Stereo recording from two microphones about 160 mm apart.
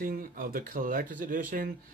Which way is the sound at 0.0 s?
65° right (ahead or behind).